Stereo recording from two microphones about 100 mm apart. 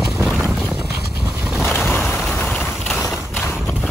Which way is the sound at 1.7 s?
15° left (ahead or behind).